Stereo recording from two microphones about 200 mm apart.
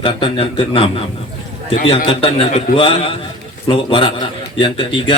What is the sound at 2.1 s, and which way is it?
A man's voice, 30° left (ahead or behind).